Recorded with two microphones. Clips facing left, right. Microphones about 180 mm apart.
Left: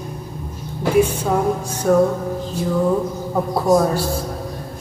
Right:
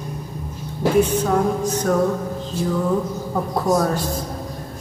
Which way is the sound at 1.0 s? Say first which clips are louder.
Left 1 dB; 10° left (ahead or behind).